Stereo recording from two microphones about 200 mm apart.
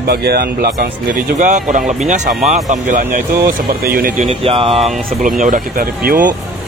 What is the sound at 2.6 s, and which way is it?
Speech, 40° right (ahead or behind).